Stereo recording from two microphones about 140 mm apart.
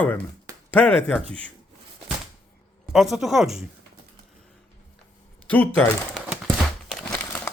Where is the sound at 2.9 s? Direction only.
Centre (ahead or behind).